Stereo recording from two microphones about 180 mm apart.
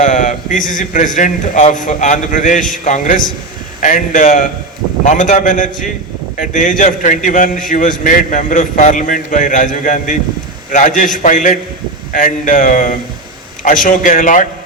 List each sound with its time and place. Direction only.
0.0 s a man's voice: 45° left (ahead or behind)